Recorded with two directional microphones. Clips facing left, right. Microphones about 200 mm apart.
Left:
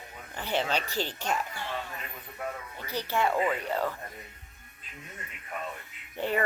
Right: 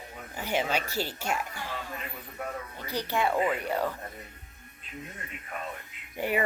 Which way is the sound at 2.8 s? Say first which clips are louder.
Even; 15° right (ahead or behind).